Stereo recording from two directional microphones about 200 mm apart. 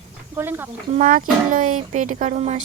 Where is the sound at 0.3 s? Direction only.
10° right (ahead or behind).